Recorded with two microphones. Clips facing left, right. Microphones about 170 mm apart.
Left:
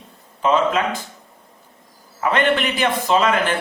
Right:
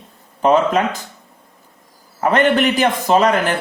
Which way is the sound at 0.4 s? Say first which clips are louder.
Right 4 dB; 40° right (ahead or behind).